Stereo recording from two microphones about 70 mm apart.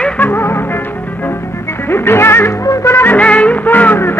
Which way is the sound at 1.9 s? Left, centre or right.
Left.